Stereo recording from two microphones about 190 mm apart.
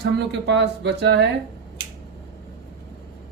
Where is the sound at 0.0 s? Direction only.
65° right (ahead or behind).